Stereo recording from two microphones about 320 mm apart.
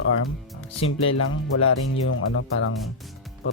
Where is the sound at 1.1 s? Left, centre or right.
Left.